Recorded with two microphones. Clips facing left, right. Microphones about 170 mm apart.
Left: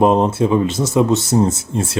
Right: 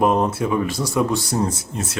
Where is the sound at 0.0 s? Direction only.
25° left (ahead or behind).